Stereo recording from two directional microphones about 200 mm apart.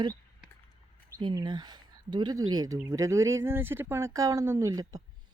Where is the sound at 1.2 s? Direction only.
20° right (ahead or behind).